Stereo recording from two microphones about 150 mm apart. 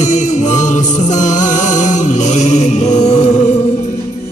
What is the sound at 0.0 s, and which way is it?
Music, 55° left (ahead or behind).